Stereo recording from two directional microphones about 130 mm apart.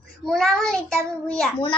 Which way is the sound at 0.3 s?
5° left (ahead or behind).